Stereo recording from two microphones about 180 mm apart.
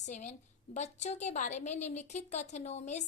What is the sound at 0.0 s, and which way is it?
A woman's voice, 45° left (ahead or behind).